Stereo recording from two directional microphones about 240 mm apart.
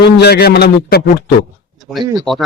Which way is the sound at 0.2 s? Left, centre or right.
Left.